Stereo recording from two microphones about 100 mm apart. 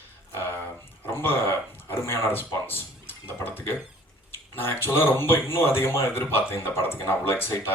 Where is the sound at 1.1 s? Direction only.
25° left (ahead or behind).